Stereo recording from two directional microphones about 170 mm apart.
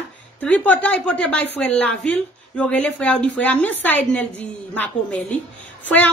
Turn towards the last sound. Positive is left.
turn(degrees=10)  # may be behind; listen again after turning